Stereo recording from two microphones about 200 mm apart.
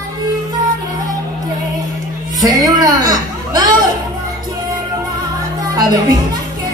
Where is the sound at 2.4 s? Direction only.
20° right (ahead or behind).